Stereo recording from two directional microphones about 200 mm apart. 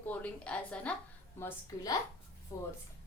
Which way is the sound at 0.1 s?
5° left (ahead or behind).